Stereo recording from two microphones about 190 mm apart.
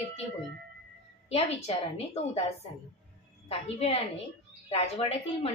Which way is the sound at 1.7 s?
30° left (ahead or behind).